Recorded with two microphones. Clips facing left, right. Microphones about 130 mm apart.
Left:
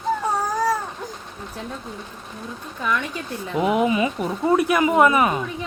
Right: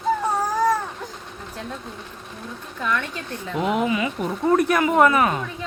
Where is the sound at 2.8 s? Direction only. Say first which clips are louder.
Left 1 dB; 15° left (ahead or behind).